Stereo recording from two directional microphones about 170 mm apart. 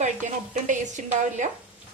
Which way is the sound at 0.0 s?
45° right (ahead or behind).